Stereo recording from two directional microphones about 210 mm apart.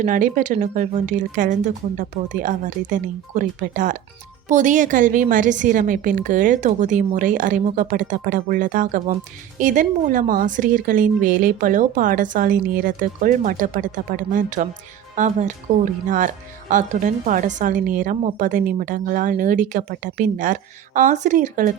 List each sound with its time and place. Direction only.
0.0 s speech: 40° right (ahead or behind)